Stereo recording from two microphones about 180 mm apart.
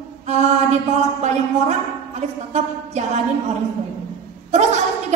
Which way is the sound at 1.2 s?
40° right (ahead or behind).